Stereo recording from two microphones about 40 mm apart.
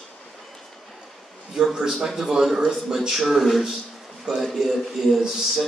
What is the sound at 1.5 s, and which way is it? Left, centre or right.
A woman's voice, centre.